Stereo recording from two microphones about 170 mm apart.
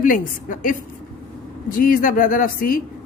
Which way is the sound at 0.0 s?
50° left (ahead or behind).